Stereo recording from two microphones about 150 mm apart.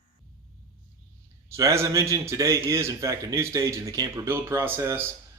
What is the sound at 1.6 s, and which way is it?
A man's voice, 20° right (ahead or behind).